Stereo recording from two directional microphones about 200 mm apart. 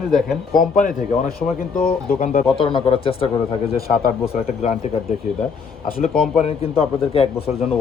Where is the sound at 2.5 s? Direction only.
25° left (ahead or behind).